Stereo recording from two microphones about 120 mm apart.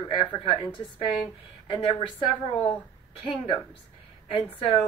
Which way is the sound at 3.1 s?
45° left (ahead or behind).